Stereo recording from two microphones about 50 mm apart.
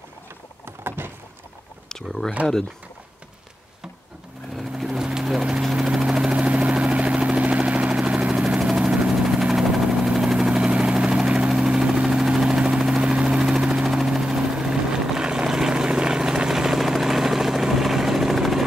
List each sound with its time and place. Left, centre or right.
0.8 s vehicle: right
1.9 s speech: centre
4.6 s helicopter: centre; by 7.9 s right
7.9 s vehicle: centre
12.9 s helicopter: centre